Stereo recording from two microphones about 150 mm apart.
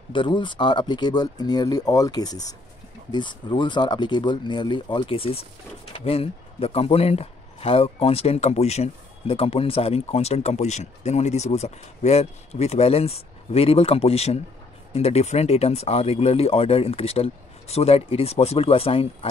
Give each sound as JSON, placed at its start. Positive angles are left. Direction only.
{"t": 0.1, "sound": "speech", "side_deg": 35}